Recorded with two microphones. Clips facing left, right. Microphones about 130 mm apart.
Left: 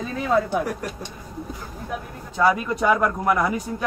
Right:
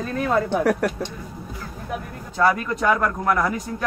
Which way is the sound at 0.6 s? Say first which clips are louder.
Right 8 dB; 75° right (ahead or behind).